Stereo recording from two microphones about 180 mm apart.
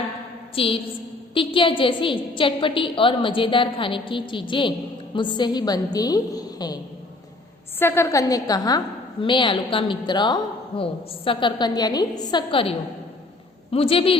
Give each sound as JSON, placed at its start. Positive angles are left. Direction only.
{"t": 0.5, "sound": "a man's voice", "side_deg": 30}
{"t": 7.8, "sound": "a woman's voice", "side_deg": 15}